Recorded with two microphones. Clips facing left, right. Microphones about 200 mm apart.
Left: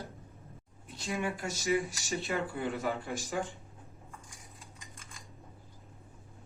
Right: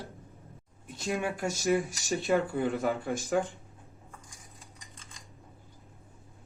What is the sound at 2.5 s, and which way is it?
Speech, 45° right (ahead or behind).